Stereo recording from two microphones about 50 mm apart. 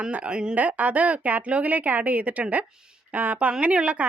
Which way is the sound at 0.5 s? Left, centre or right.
Right.